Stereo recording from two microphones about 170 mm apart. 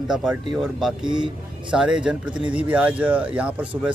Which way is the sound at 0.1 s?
5° right (ahead or behind).